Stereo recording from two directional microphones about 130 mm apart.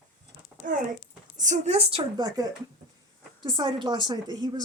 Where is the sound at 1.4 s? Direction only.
70° right (ahead or behind).